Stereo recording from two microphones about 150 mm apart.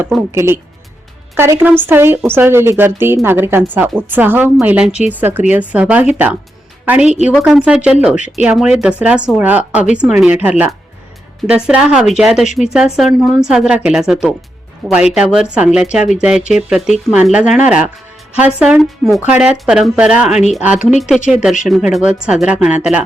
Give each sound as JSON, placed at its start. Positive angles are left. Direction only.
{"t": 0.3, "sound": "a woman's voice", "side_deg": -15}